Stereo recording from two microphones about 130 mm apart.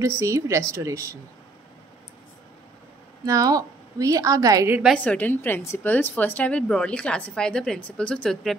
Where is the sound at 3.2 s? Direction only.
25° right (ahead or behind).